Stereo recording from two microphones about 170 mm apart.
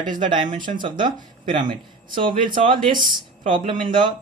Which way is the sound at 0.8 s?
25° right (ahead or behind).